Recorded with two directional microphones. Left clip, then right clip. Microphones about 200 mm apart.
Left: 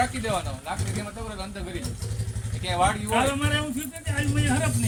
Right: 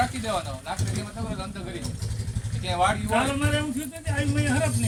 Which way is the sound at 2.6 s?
15° right (ahead or behind).